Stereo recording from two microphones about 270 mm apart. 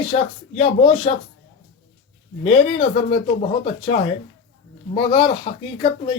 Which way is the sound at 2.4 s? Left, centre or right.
Left.